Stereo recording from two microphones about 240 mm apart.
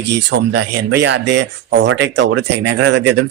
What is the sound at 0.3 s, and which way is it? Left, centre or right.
Speech, right.